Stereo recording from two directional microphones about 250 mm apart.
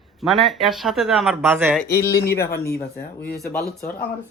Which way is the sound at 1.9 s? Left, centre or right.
Centre.